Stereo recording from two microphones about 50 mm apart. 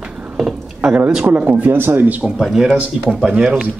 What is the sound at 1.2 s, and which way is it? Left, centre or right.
Speech, right.